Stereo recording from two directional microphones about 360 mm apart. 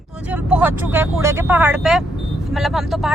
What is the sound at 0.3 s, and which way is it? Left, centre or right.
Speech, centre.